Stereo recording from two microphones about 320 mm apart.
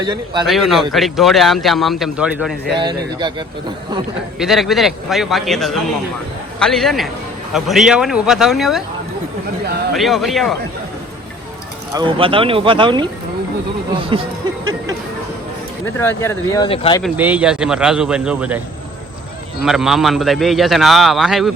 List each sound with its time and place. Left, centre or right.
0.0 s speech: centre
0.4 s a man's voice: centre
2.7 s speech: centre
4.4 s a man's voice: centre
9.9 s a man's voice: centre
11.9 s speech: centre
16.0 s speech: centre
17.0 s a man's voice: centre
19.6 s a man's voice: centre